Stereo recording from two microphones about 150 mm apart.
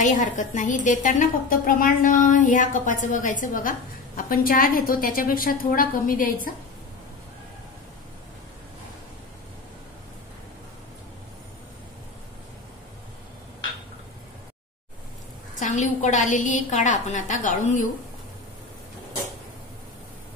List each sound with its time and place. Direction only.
0.0 s a woman's voice: 55° left (ahead or behind)
15.7 s a woman's voice: 55° left (ahead or behind)